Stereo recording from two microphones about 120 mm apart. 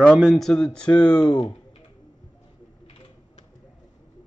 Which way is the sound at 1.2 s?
35° left (ahead or behind).